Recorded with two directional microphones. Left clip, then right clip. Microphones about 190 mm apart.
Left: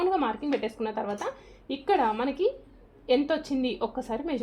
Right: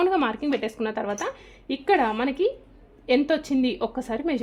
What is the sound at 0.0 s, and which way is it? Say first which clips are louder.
A woman's voice: right 4 dB; 35° right (ahead or behind).